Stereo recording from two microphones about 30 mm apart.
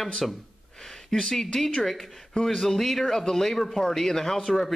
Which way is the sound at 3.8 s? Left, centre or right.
Centre.